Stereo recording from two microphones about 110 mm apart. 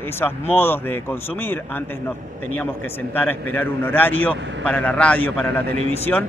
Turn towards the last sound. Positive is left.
turn(degrees=15)  # may be behind; listen again after turning